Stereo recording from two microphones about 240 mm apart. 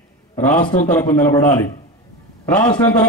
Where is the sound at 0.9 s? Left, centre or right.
Centre.